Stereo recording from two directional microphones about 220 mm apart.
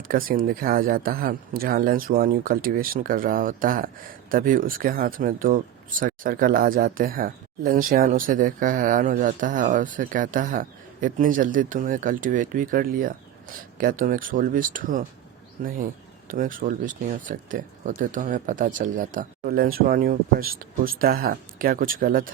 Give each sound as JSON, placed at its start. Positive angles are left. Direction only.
{"t": 0.1, "sound": "speech", "side_deg": -40}